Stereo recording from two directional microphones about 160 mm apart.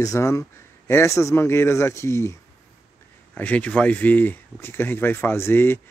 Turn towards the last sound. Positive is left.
turn(degrees=15)  # may be behind; listen again after turning